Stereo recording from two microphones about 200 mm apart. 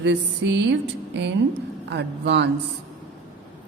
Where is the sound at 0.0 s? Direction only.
60° right (ahead or behind).